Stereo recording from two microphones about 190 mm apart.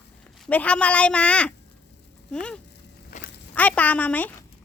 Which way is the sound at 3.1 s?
40° left (ahead or behind).